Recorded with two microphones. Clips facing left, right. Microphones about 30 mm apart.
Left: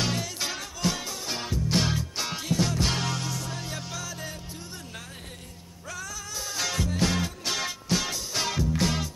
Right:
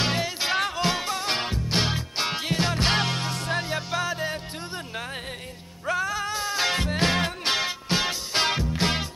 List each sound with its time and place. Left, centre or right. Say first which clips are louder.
0.0 s music: right 4 dB; right
1.1 s music: right 6 dB; right
1.7 s music: left 1 dB; right
3.6 s music: right 8 dB; right
5.9 s music: right 11 dB; right